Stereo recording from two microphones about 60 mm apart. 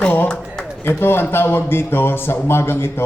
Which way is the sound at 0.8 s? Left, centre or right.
Left.